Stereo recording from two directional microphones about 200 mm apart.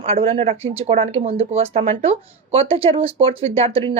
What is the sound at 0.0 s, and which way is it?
Speech, 30° right (ahead or behind).